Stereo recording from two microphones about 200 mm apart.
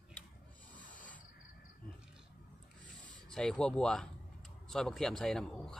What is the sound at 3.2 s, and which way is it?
A man's voice, 5° left (ahead or behind).